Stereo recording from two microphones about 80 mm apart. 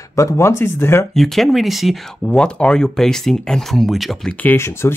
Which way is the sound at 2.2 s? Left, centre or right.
Centre.